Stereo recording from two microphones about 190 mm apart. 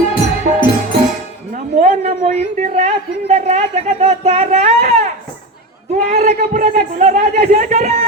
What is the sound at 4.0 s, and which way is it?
Speech, 35° right (ahead or behind).